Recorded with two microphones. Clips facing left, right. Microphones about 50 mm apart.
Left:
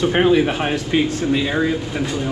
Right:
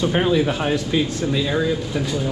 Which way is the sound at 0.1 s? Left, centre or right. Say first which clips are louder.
Left 3 dB; left.